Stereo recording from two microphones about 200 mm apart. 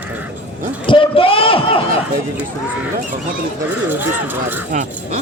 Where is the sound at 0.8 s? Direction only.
25° left (ahead or behind).